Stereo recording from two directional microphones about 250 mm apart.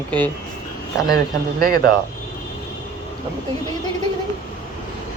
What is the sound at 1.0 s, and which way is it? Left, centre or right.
Speech, right.